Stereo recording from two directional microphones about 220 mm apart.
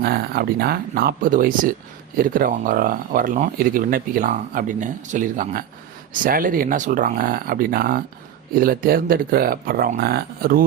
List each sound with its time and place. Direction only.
0.0 s speech: 45° right (ahead or behind)